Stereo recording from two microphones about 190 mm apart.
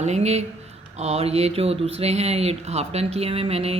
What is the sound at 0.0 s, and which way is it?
Speech, 35° right (ahead or behind).